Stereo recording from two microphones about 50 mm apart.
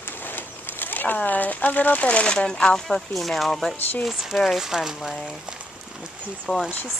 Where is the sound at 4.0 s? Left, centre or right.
Centre.